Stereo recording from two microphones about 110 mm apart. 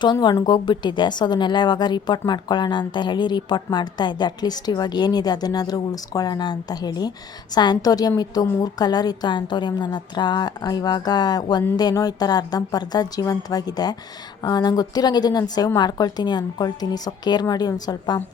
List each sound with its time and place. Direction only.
0.0 s a woman's voice: 40° left (ahead or behind)